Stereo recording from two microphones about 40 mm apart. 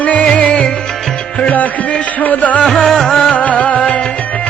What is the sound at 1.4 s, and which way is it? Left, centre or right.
Music, left.